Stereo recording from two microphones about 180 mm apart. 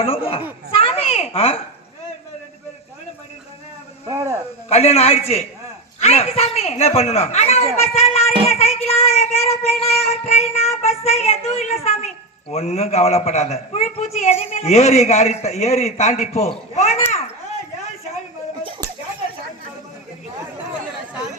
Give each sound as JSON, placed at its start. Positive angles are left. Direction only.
{"t": 0.0, "sound": "child singing", "side_deg": 30}
{"t": 0.7, "sound": "a child's voice", "side_deg": 30}
{"t": 4.0, "sound": "speech", "side_deg": -15}
{"t": 4.7, "sound": "child singing", "side_deg": 35}